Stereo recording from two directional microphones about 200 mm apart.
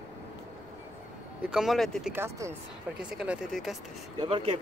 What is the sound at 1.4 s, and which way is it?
Speech, 5° right (ahead or behind).